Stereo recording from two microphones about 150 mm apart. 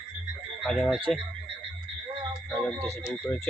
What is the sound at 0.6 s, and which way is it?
Speech, 5° left (ahead or behind).